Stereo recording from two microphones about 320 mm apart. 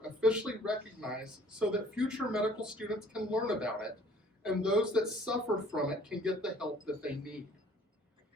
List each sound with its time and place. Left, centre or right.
0.2 s speech: centre